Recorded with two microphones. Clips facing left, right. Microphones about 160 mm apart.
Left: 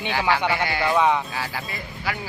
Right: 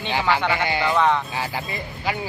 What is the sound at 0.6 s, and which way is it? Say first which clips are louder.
Speech: right 1 dB; 20° right (ahead or behind).